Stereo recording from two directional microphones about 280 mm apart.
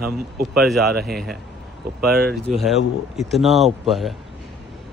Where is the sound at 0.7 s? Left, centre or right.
Centre.